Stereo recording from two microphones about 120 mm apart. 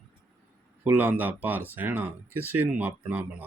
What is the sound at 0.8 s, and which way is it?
Speech, 15° right (ahead or behind).